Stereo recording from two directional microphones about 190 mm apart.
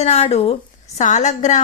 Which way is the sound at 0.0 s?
35° left (ahead or behind).